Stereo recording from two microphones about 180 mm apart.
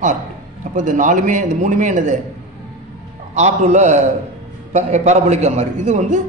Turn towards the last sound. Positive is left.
turn(degrees=-40)  # may be behind; listen again after turning